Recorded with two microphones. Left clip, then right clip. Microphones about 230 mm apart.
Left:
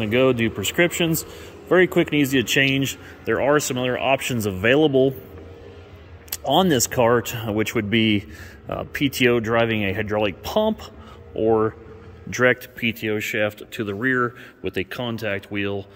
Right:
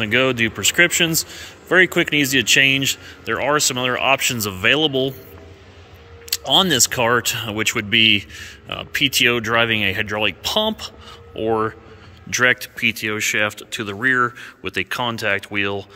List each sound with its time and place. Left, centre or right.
0.0 s a man's voice: centre
6.3 s a man's voice: centre